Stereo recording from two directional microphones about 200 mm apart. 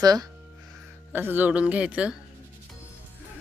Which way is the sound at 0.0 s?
20° right (ahead or behind).